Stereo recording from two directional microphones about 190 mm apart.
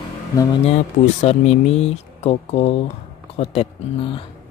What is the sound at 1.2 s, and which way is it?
Speech, 35° left (ahead or behind).